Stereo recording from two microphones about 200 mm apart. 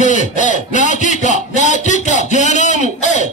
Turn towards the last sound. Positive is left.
turn(degrees=35)  # may be behind; listen again after turning